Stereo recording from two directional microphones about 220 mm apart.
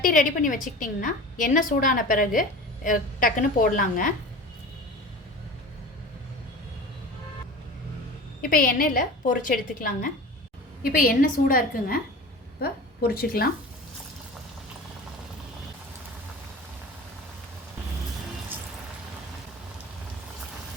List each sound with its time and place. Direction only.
0.0 s a woman's voice: 35° left (ahead or behind)
8.4 s a woman's voice: 40° left (ahead or behind)